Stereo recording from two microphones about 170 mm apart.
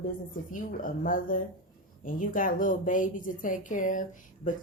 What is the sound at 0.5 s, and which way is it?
A woman's voice, 55° left (ahead or behind).